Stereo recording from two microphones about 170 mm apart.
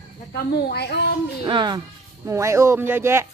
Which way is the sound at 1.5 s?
25° right (ahead or behind).